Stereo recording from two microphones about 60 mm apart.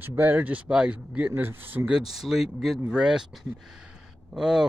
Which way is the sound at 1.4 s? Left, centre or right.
Right.